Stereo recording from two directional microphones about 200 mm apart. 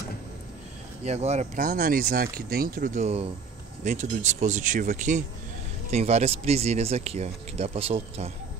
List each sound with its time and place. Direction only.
1.0 s speech: 30° right (ahead or behind)